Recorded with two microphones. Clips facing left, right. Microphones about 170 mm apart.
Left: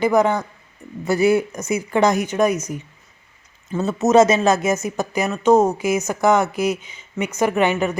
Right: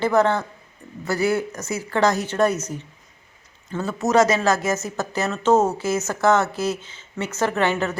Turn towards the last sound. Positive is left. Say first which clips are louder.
# left 3 dB
turn(degrees=15)  # may be behind; listen again after turning